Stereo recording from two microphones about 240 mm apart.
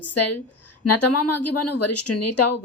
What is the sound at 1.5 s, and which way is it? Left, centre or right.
Speech, left.